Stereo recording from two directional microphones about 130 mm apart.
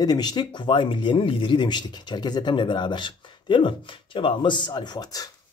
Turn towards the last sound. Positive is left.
turn(degrees=30)  # may be behind; listen again after turning